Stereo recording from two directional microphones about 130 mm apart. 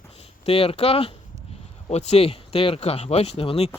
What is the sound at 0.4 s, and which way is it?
Speech, 45° left (ahead or behind).